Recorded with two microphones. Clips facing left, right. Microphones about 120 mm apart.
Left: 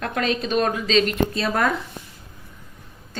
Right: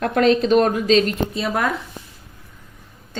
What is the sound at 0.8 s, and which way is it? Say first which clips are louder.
Speech: right 4 dB; 50° right (ahead or behind).